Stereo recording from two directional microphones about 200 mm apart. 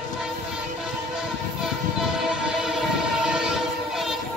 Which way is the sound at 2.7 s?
5° right (ahead or behind).